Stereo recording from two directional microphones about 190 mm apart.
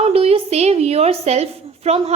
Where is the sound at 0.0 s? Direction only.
30° right (ahead or behind).